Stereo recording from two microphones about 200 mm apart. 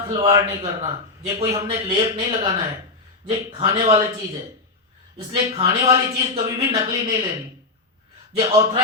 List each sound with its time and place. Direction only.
0.1 s speech: 25° right (ahead or behind)
5.3 s speech: 25° right (ahead or behind)
8.4 s speech: 25° right (ahead or behind)